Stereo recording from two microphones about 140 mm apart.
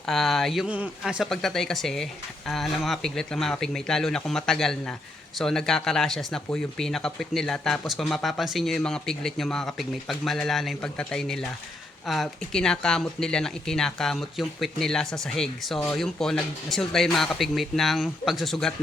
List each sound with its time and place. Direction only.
0.0 s speech: centre (ahead or behind)